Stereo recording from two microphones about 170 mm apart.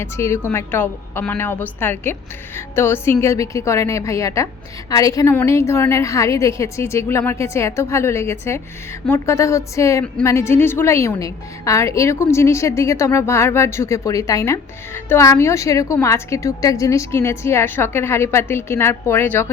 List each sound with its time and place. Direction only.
0.0 s a woman's voice: 15° left (ahead or behind)